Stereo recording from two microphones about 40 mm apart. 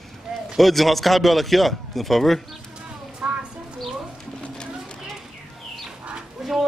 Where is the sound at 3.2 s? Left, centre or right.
Right.